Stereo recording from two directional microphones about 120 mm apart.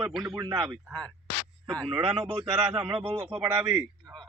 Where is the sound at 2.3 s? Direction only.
50° right (ahead or behind).